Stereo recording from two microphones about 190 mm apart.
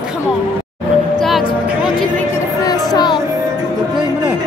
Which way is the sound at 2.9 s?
25° left (ahead or behind).